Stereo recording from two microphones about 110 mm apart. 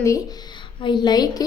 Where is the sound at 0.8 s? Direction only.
45° left (ahead or behind).